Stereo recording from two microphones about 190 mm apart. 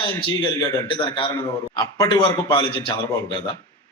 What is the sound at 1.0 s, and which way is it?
A man's voice, 25° left (ahead or behind).